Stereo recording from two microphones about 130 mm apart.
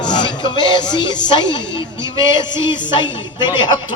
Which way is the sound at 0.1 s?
35° left (ahead or behind).